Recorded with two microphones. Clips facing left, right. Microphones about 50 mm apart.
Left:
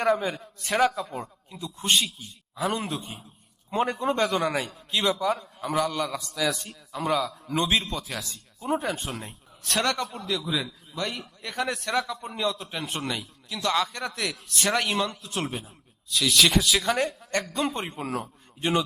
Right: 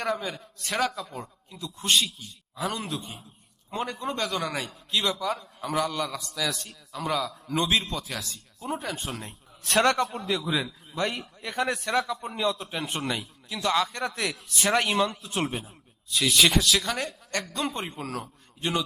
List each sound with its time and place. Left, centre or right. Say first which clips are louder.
0.2 s a man's voice: left 4 dB; left
0.6 s a man's voice: left 5 dB; centre